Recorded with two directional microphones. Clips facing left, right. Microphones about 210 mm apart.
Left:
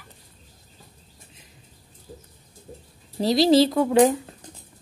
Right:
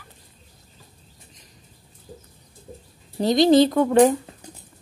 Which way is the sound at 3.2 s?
Centre (ahead or behind).